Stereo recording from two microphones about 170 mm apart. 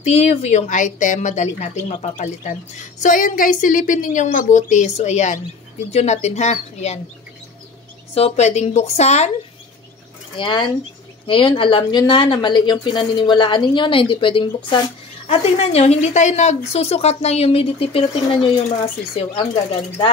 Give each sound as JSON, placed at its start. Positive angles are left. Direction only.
{"t": 0.0, "sound": "a woman's voice", "side_deg": 40}
{"t": 3.0, "sound": "a woman's voice", "side_deg": 50}
{"t": 8.1, "sound": "a woman's voice", "side_deg": 40}
{"t": 10.3, "sound": "a woman's voice", "side_deg": 30}